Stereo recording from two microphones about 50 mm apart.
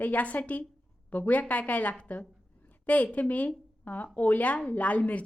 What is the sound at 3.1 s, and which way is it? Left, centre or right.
A woman's voice, left.